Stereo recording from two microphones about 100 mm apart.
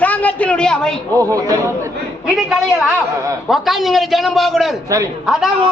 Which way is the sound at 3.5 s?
Centre (ahead or behind).